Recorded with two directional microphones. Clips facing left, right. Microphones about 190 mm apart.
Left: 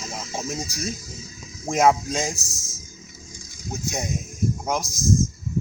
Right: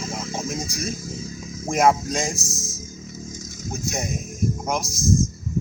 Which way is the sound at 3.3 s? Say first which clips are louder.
Right 8 dB; 45° right (ahead or behind).